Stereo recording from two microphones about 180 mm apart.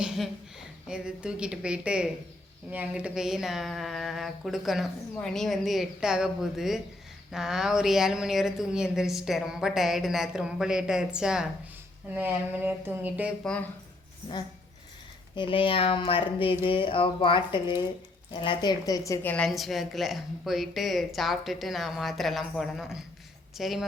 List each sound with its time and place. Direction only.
0.0 s a woman's voice: 5° right (ahead or behind)
13.4 s a woman's voice: 5° left (ahead or behind)
15.4 s a woman's voice: 30° left (ahead or behind); by 23.8 s centre (ahead or behind)